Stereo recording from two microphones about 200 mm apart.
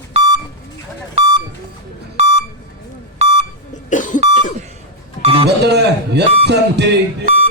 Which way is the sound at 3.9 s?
40° left (ahead or behind).